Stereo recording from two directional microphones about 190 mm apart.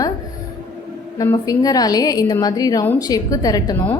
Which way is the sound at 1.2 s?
20° left (ahead or behind).